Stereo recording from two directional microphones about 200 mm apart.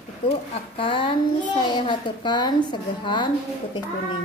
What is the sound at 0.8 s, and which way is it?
A woman's voice, 25° left (ahead or behind).